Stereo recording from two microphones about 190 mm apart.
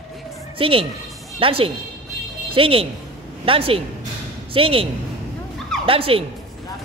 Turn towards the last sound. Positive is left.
turn(degrees=-30)  # may be behind; listen again after turning